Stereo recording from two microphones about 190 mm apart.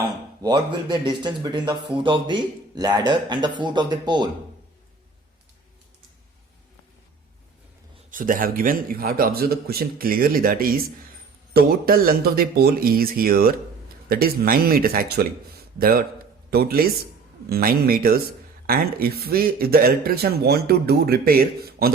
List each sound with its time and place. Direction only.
0.0 s speech: 25° right (ahead or behind)
8.1 s a man's voice: 45° right (ahead or behind)